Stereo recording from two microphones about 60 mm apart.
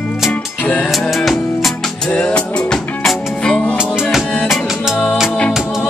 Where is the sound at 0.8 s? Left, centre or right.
Centre.